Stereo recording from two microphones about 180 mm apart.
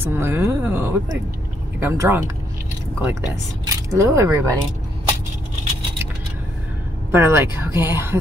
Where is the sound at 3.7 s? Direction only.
15° right (ahead or behind).